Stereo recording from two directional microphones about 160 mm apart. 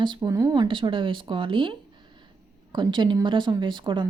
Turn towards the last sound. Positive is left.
turn(degrees=-30)  # may be behind; listen again after turning